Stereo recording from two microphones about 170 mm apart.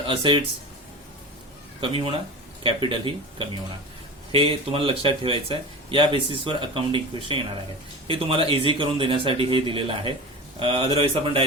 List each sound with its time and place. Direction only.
0.1 s a man's voice: 30° right (ahead or behind)
1.8 s a man's voice: 30° right (ahead or behind)